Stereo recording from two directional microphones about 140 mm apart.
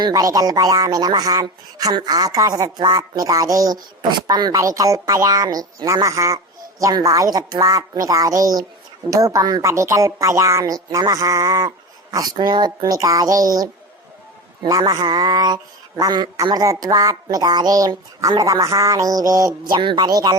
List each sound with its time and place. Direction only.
0.0 s speech: 25° right (ahead or behind)